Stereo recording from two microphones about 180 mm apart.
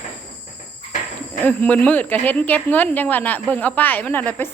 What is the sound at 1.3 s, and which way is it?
Speech, 5° left (ahead or behind).